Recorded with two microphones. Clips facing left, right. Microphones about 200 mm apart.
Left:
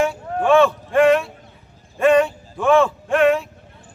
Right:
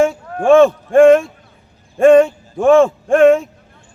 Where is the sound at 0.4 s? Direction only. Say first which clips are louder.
Right 6 dB; 45° right (ahead or behind).